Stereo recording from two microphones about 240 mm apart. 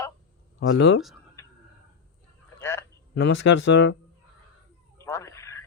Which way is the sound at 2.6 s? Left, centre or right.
Centre.